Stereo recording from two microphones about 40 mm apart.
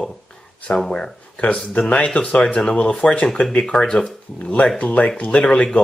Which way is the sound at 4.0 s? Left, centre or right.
Left.